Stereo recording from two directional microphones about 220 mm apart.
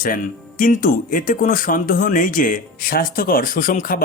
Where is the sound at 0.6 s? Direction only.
40° left (ahead or behind).